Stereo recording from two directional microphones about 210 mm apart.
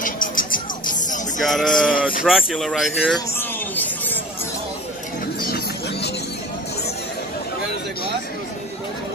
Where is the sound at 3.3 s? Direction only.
10° left (ahead or behind).